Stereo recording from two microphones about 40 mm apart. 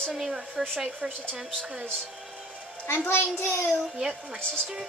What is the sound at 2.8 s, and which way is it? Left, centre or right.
Speech, left.